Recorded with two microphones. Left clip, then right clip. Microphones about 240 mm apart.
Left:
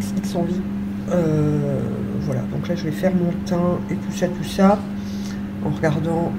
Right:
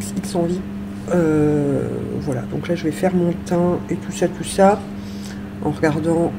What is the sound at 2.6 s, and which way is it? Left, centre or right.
Speech, right.